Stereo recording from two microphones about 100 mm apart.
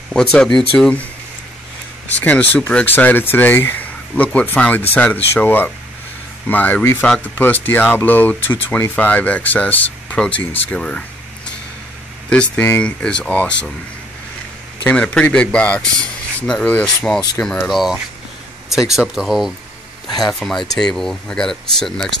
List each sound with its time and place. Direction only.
0.1 s speech: 10° left (ahead or behind)
2.1 s speech: 15° left (ahead or behind)
12.3 s speech: 15° left (ahead or behind)
14.8 s speech: 10° left (ahead or behind)
18.9 s speech: 5° right (ahead or behind)